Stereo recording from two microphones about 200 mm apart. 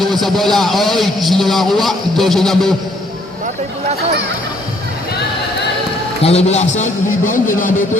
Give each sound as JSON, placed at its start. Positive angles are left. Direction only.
{"t": 0.0, "sound": "a man's voice", "side_deg": 0}
{"t": 6.2, "sound": "a man's voice", "side_deg": 30}